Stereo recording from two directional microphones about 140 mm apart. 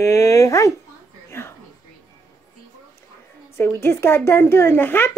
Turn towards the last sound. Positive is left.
turn(degrees=15)  # may be behind; listen again after turning